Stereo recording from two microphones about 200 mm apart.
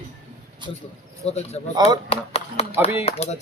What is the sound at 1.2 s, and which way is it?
Speech, 30° left (ahead or behind).